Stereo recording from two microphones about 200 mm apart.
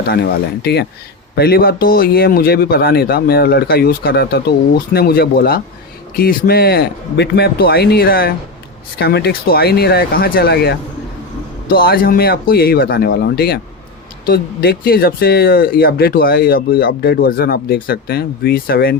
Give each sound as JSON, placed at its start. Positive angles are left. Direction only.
{"t": 0.6, "sound": "speech", "side_deg": 55}